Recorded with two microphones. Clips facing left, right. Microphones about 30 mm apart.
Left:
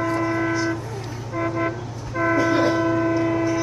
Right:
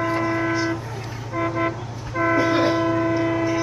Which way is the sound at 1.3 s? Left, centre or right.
Centre.